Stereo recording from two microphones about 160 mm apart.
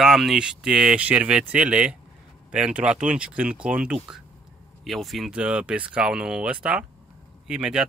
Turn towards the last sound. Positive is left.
turn(degrees=-5)  # may be behind; listen again after turning